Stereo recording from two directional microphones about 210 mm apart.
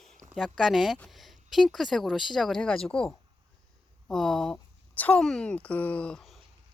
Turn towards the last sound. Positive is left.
turn(degrees=0)  # may be behind; listen again after turning